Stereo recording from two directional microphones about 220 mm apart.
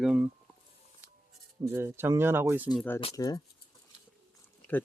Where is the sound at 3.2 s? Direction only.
15° left (ahead or behind).